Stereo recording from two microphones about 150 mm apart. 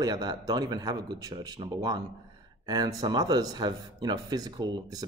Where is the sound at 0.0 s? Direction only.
25° right (ahead or behind).